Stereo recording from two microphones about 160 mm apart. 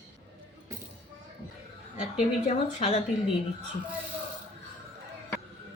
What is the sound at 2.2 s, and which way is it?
Speech, 45° left (ahead or behind).